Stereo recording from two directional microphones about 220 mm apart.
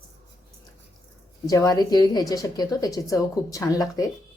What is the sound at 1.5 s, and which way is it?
A woman's voice, 15° left (ahead or behind).